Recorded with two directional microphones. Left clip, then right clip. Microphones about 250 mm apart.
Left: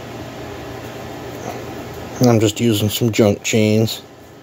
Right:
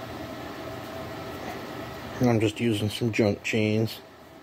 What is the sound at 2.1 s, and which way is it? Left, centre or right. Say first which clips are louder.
Speech: left 10 dB; centre.